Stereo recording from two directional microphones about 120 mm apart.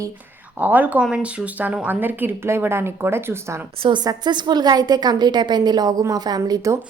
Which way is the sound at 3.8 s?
35° right (ahead or behind).